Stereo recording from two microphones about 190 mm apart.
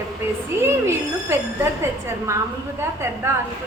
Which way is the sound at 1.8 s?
15° right (ahead or behind).